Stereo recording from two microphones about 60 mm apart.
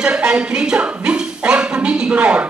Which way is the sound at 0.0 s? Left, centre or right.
Centre.